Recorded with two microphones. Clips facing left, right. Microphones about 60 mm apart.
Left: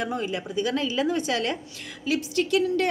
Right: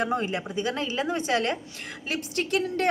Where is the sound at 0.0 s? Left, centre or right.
Right.